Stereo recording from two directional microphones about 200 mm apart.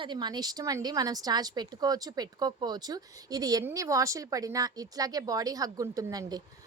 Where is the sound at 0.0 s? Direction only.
20° right (ahead or behind).